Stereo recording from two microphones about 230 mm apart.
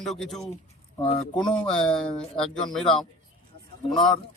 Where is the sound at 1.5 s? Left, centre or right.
Centre.